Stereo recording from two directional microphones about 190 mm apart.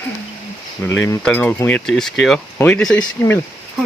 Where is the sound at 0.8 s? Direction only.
10° left (ahead or behind).